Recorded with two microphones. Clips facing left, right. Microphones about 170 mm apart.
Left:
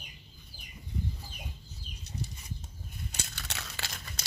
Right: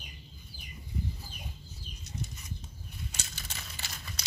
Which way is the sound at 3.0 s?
60° left (ahead or behind).